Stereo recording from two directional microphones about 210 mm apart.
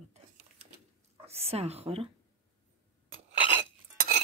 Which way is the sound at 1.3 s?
30° right (ahead or behind).